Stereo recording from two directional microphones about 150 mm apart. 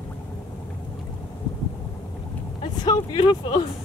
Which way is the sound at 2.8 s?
30° left (ahead or behind).